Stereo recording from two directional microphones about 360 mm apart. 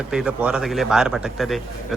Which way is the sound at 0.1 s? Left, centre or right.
Centre.